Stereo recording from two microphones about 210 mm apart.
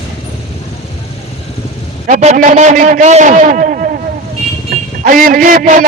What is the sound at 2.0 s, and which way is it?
A man's voice, 35° right (ahead or behind).